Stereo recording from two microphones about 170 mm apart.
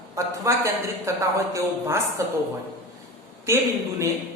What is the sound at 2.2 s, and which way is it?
Speech, 15° right (ahead or behind).